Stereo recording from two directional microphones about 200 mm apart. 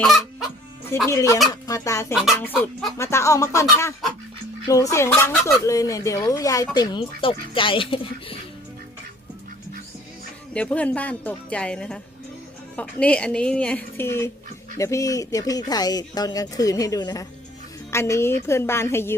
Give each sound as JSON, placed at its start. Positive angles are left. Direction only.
{"t": 0.0, "sound": "fowl", "side_deg": 0}
{"t": 1.0, "sound": "speech", "side_deg": 15}
{"t": 10.5, "sound": "a woman's voice", "side_deg": 5}